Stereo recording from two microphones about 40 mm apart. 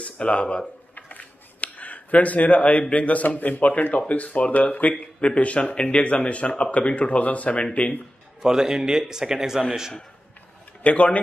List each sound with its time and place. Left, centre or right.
0.0 s speech: left
0.9 s a sound: left
2.9 s speech: left
5.2 s speech: left
8.4 s speech: centre
10.8 s speech: left